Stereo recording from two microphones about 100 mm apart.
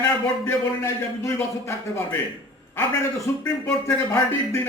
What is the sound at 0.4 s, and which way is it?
A man's voice, 30° left (ahead or behind).